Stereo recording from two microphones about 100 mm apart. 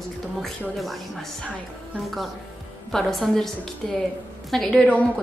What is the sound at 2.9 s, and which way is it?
A woman's voice, 5° left (ahead or behind).